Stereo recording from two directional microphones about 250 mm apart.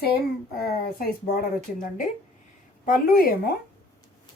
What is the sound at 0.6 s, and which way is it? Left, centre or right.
Speech, left.